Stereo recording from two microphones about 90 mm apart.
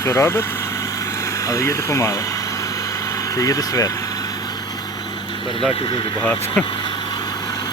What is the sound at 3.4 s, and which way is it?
Speech, 40° left (ahead or behind).